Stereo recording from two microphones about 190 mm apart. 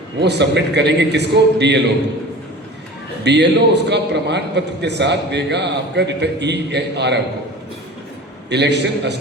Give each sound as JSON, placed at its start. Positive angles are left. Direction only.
{"t": 0.2, "sound": "a man's voice", "side_deg": -65}
{"t": 3.2, "sound": "a man's voice", "side_deg": -65}
{"t": 8.4, "sound": "a man's voice", "side_deg": -65}